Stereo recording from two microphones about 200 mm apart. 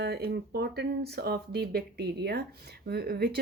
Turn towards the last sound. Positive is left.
turn(degrees=-50)  # may be behind; listen again after turning